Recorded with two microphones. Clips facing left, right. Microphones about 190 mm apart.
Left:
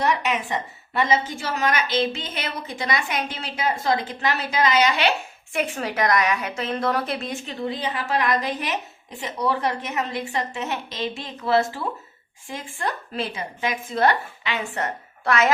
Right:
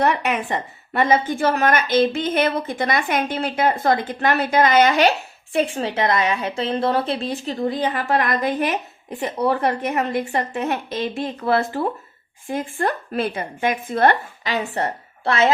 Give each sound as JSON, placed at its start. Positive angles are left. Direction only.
{"t": 0.0, "sound": "a woman's voice", "side_deg": -55}
{"t": 5.5, "sound": "a woman's voice", "side_deg": -30}
{"t": 14.5, "sound": "a woman's voice", "side_deg": -35}